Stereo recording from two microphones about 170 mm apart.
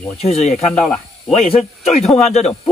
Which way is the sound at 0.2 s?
40° left (ahead or behind).